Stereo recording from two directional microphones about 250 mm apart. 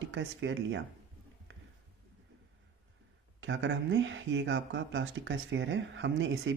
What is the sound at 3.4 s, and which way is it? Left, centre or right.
Speech, right.